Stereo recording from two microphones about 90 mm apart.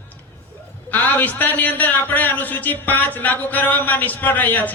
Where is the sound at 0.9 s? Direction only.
20° left (ahead or behind).